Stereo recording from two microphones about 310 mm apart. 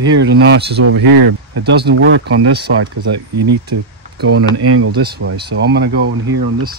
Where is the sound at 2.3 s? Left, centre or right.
Right.